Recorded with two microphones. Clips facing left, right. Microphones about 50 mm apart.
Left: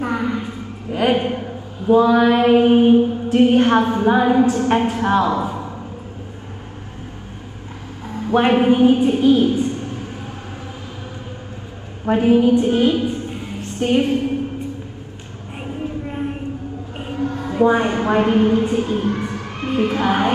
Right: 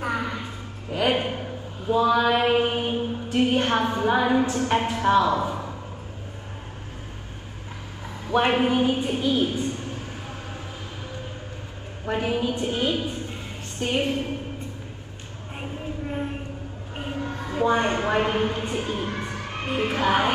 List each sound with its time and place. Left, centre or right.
0.1 s a sound: left
0.9 s music: left
1.9 s mantra: left
8.3 s a woman's voice: left
12.1 s mantra: left
17.2 s a sound: left
17.6 s mantra: left
19.4 s music: right
19.9 s mantra: left